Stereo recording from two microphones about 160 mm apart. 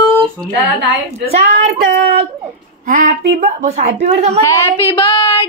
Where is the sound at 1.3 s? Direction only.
45° right (ahead or behind).